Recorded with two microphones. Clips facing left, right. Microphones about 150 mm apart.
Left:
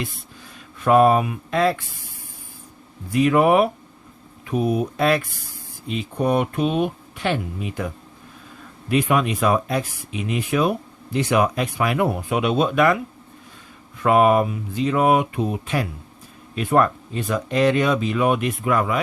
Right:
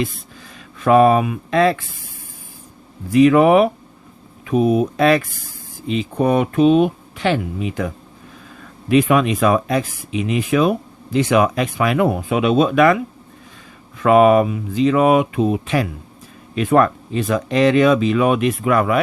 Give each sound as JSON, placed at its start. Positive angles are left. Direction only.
{"t": 0.8, "sound": "speech", "side_deg": -90}
{"t": 3.1, "sound": "speech", "side_deg": -90}
{"t": 6.5, "sound": "speech", "side_deg": -90}
{"t": 14.0, "sound": "speech", "side_deg": -90}